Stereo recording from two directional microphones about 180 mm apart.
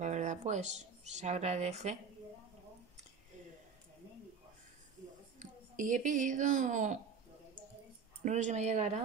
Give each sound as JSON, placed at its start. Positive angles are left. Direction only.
{"t": 0.0, "sound": "speech", "side_deg": -40}
{"t": 5.4, "sound": "speech", "side_deg": -45}
{"t": 8.2, "sound": "a woman's voice", "side_deg": -40}